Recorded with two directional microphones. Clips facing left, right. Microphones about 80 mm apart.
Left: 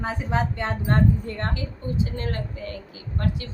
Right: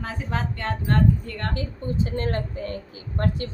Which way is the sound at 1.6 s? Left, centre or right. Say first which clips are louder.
Right 1 dB; right.